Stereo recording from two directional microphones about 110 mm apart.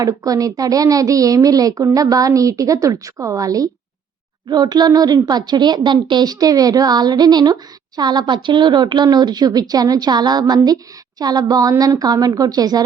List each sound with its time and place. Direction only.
0.0 s a woman's voice: 35° right (ahead or behind)